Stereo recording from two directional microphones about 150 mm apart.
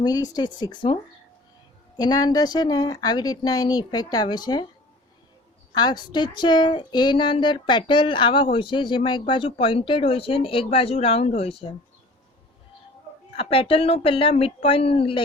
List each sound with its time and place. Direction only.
0.0 s speech: 25° left (ahead or behind)
2.0 s speech: 25° left (ahead or behind)
5.7 s a woman's voice: 30° left (ahead or behind)
13.3 s a woman's voice: 40° left (ahead or behind)